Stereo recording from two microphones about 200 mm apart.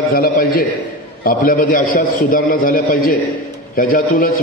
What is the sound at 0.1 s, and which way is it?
A man's voice, 50° left (ahead or behind).